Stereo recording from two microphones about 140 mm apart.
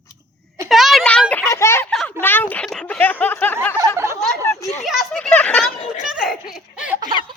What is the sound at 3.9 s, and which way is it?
Speech, 20° right (ahead or behind).